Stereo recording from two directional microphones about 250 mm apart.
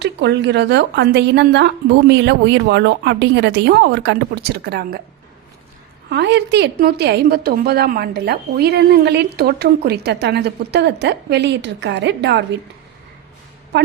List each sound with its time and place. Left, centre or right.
0.0 s a woman's voice: right
6.1 s a woman's voice: right